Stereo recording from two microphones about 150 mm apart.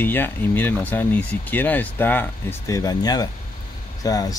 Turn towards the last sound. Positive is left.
turn(degrees=25)  # may be behind; listen again after turning